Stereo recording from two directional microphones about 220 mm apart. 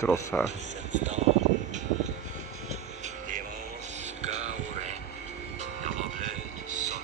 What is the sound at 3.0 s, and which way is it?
Music, 35° right (ahead or behind).